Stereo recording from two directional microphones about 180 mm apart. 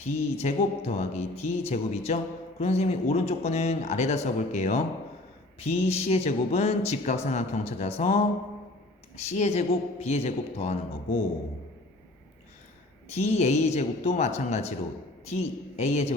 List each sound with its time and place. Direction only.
0.0 s speech: 40° left (ahead or behind)
9.2 s speech: 40° left (ahead or behind)
13.1 s speech: 35° left (ahead or behind)